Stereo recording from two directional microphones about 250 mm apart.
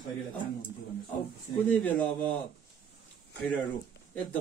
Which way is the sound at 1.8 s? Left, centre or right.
Centre.